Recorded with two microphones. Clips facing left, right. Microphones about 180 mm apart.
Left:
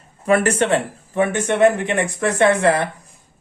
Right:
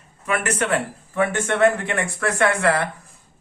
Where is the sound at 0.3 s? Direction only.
30° left (ahead or behind).